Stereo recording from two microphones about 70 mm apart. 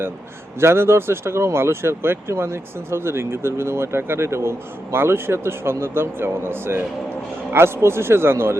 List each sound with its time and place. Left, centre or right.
0.6 s speech: right